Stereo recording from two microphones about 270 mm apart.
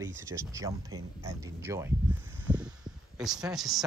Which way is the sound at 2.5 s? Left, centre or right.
Centre.